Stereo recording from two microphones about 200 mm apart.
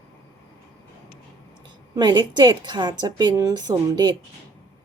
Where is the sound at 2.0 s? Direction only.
20° right (ahead or behind).